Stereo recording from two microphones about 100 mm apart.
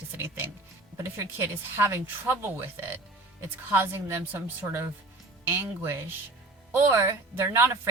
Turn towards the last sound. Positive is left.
turn(degrees=-25)  # may be behind; listen again after turning